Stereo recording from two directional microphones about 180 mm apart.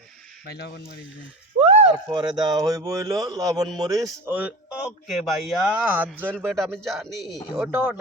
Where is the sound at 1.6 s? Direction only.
30° right (ahead or behind).